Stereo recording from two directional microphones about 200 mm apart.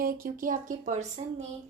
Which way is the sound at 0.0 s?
45° right (ahead or behind).